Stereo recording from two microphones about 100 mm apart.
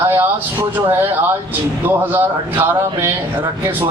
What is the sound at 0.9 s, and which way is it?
A man's voice, 20° right (ahead or behind).